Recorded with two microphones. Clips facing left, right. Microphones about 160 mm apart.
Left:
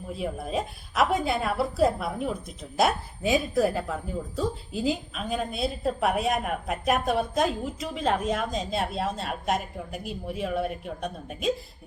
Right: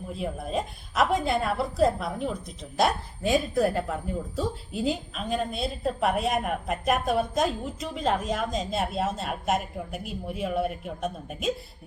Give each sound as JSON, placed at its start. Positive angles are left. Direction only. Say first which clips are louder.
{"t": 0.1, "sound": "a woman's voice", "louder": "left 1 dB", "side_deg": 0}